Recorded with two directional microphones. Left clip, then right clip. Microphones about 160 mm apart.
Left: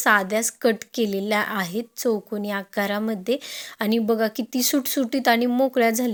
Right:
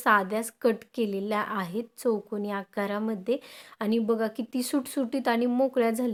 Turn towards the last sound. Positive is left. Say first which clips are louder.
# left 5 dB
turn(degrees=20)  # may be behind; listen again after turning